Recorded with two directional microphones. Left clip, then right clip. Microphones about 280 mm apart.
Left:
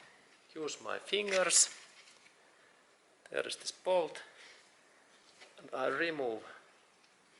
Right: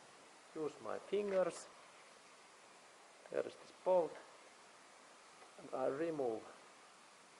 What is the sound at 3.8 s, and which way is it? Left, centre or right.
Speech, right.